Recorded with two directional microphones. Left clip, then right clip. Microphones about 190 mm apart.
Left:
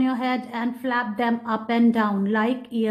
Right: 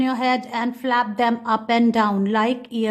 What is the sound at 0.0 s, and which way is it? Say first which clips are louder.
A woman's voice: right 4 dB; 20° right (ahead or behind).